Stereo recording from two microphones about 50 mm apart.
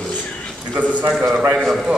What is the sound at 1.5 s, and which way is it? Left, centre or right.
Speech, centre.